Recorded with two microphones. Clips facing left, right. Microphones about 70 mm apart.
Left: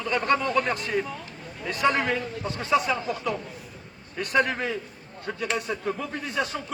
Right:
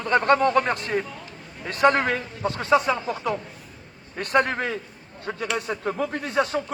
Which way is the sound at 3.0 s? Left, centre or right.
Right.